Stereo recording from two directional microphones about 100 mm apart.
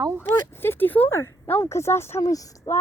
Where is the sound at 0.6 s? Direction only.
20° left (ahead or behind).